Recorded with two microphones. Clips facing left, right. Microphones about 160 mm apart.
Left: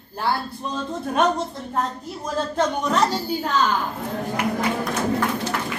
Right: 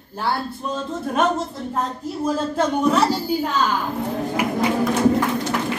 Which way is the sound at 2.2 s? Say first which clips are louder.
Right 2 dB; 5° right (ahead or behind).